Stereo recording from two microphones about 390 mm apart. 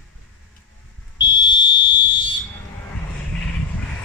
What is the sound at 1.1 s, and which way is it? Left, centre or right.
Fire alarm, centre.